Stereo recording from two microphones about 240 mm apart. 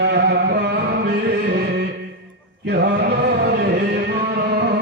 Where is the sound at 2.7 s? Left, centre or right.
Right.